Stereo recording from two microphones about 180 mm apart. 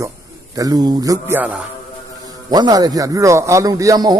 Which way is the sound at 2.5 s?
20° right (ahead or behind).